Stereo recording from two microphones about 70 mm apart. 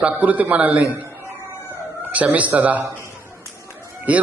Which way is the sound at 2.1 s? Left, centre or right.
Right.